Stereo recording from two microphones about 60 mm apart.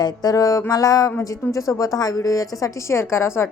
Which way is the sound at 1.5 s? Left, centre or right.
Left.